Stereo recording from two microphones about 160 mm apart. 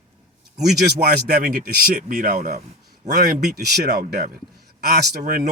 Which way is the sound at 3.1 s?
80° right.